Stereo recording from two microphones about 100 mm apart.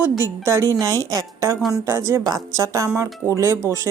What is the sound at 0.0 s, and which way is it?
A woman's voice, 25° right (ahead or behind).